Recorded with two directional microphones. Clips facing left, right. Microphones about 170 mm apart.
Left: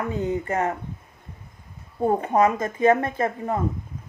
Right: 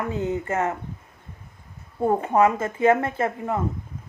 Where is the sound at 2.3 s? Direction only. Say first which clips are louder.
Right 1 dB; 15° left (ahead or behind).